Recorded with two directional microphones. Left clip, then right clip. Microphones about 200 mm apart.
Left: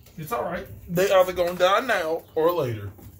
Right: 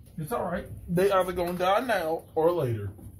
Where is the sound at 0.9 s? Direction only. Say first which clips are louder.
Left 5 dB; centre (ahead or behind).